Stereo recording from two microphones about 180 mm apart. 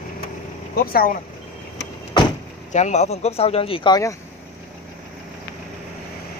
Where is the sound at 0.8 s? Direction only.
55° left (ahead or behind).